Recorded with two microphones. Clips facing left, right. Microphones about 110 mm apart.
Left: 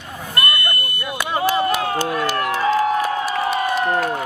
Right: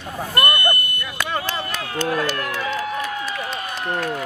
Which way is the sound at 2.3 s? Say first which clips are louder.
Left 7 dB; 40° left (ahead or behind).